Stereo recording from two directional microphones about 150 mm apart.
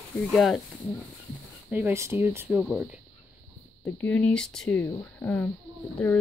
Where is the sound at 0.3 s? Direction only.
Centre (ahead or behind).